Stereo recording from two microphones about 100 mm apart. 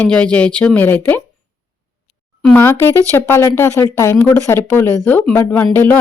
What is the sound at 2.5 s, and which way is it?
Speech, 20° left (ahead or behind).